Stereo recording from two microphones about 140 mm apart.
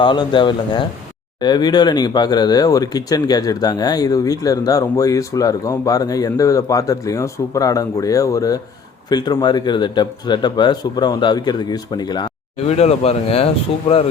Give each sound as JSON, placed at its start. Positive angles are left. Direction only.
{"t": 0.0, "sound": "speech", "side_deg": 35}
{"t": 12.5, "sound": "speech", "side_deg": 50}